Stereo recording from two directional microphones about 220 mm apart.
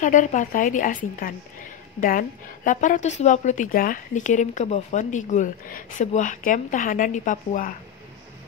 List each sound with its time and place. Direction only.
0.0 s a woman's voice: 35° left (ahead or behind)